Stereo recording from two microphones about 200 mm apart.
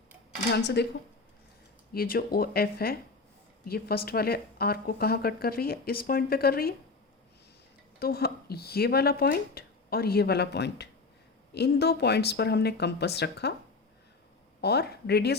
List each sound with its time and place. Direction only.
0.8 s a woman's voice: 55° left (ahead or behind)
7.9 s a woman's voice: 50° left (ahead or behind)
14.6 s a woman's voice: 55° left (ahead or behind)